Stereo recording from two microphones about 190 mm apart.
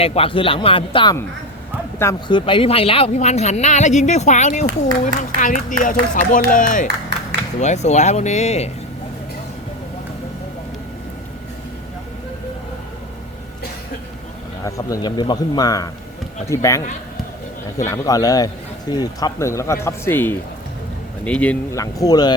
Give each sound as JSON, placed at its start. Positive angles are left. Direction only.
{"t": 0.0, "sound": "speech", "side_deg": 30}
{"t": 7.1, "sound": "music", "side_deg": -65}
{"t": 7.6, "sound": "speech", "side_deg": 35}
{"t": 14.6, "sound": "speech", "side_deg": 15}